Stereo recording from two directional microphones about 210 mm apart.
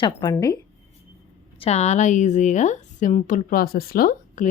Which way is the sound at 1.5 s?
30° left (ahead or behind).